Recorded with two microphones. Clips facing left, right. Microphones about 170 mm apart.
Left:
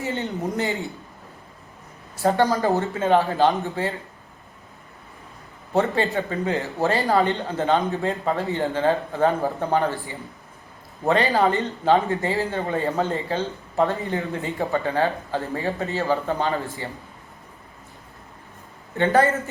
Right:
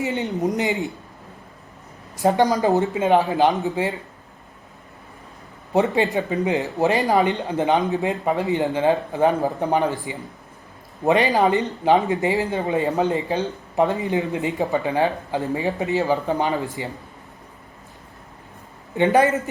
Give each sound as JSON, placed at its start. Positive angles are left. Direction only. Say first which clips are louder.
{"t": 0.0, "sound": "speech", "louder": "right 4 dB", "side_deg": -15}
{"t": 2.1, "sound": "speech", "louder": "right 2 dB", "side_deg": -15}
{"t": 5.7, "sound": "speech", "louder": "right 2 dB", "side_deg": -15}
{"t": 18.9, "sound": "speech", "louder": "right 2 dB", "side_deg": -15}